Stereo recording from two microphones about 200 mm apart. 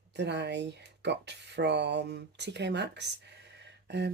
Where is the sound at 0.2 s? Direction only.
55° right (ahead or behind).